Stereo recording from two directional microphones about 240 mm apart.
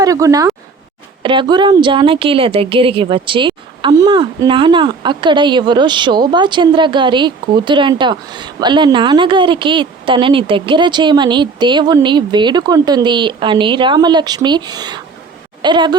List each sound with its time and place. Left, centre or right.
0.0 s a woman's voice: centre